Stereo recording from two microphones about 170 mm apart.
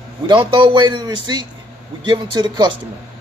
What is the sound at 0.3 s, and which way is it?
A man's voice, 30° right (ahead or behind).